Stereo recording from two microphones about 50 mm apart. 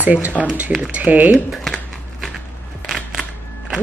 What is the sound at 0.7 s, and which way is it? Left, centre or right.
Speech, centre.